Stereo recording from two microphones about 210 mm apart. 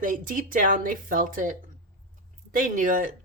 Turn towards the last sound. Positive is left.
turn(degrees=-40)  # may be behind; listen again after turning